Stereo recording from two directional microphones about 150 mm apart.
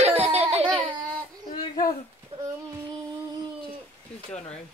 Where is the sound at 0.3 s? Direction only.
45° right (ahead or behind).